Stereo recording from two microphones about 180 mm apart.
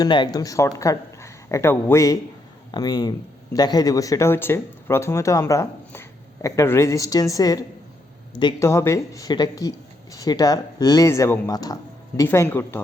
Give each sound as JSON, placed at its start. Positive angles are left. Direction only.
{"t": 0.0, "sound": "a man's voice", "side_deg": 25}
{"t": 8.6, "sound": "speech", "side_deg": 15}